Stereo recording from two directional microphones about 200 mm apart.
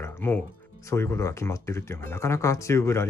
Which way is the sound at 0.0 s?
10° left (ahead or behind).